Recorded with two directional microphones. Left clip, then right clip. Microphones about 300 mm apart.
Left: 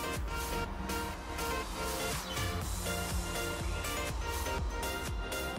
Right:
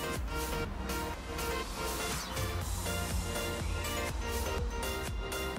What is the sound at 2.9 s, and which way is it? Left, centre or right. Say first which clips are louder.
Music: even; centre.